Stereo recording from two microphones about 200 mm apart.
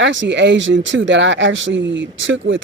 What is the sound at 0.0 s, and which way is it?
Speech, 65° right (ahead or behind).